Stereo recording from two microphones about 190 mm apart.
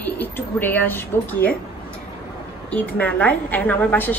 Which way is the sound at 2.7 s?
10° left (ahead or behind).